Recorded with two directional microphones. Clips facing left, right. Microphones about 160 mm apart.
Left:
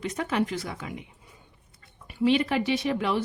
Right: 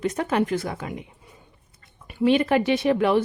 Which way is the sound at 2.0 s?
50° right (ahead or behind).